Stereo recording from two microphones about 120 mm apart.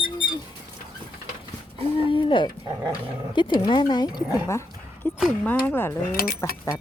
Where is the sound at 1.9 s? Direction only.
45° left (ahead or behind).